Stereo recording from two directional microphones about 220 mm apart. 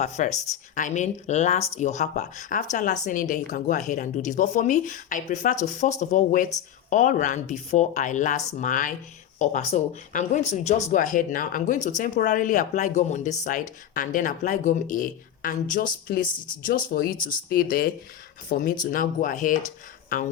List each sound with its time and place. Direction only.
0.0 s speech: 30° left (ahead or behind)